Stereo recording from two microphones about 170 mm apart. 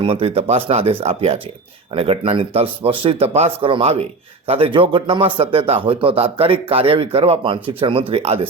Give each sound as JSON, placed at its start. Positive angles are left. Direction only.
{"t": 0.0, "sound": "speech", "side_deg": -30}